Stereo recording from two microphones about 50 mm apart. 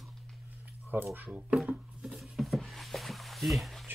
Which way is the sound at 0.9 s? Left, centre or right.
Right.